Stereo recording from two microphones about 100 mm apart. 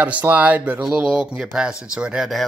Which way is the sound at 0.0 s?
15° right (ahead or behind).